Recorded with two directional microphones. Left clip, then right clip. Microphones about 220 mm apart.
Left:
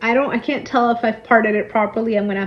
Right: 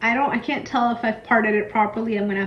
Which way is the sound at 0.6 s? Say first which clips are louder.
Left 6 dB; 25° right (ahead or behind).